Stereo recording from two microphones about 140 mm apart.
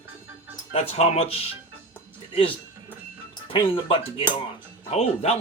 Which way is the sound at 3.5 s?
40° left (ahead or behind).